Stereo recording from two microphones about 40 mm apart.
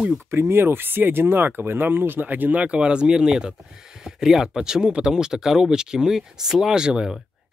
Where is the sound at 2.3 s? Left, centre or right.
Right.